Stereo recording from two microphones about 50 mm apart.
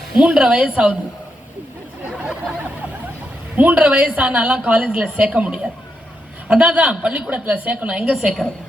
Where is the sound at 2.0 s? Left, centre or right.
Right.